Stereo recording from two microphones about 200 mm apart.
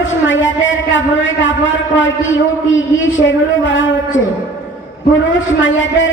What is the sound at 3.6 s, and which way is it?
Speech, 70° left (ahead or behind).